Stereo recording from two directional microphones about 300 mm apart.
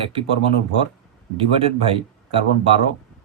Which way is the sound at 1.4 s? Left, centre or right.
Centre.